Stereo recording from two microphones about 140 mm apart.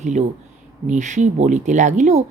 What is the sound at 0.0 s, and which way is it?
A woman's voice, 60° right (ahead or behind).